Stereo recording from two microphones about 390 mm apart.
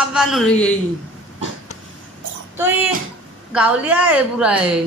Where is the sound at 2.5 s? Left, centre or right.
Centre.